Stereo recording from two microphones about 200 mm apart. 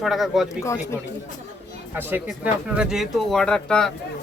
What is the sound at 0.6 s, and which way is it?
Speech, 15° left (ahead or behind).